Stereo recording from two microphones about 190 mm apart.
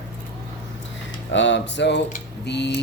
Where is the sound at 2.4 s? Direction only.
65° left (ahead or behind).